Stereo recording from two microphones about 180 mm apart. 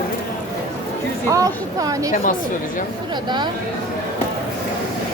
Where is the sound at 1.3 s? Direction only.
20° right (ahead or behind).